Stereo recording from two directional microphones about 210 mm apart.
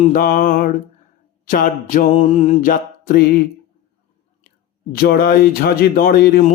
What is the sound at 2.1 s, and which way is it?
Mantra, 30° left (ahead or behind).